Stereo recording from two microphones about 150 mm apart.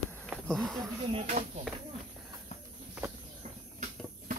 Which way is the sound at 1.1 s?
50° right (ahead or behind).